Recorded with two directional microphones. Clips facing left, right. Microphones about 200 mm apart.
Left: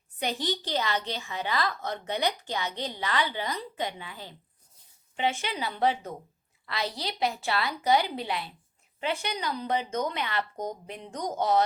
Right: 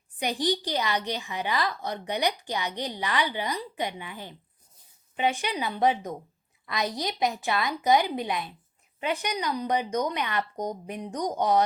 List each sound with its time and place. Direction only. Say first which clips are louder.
0.2 s a woman's voice: right 4 dB; 15° right (ahead or behind)